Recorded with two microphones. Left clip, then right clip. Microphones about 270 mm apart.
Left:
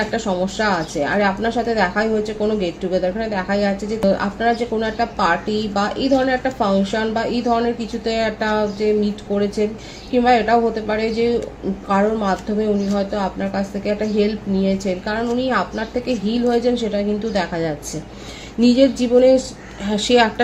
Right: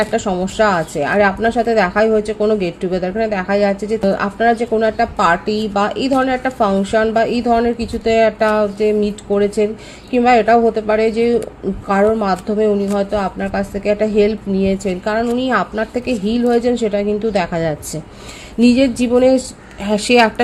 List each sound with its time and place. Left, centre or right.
0.1 s speech: right